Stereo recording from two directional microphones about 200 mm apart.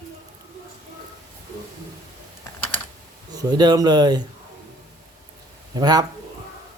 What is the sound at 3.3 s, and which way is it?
Speech, 20° right (ahead or behind).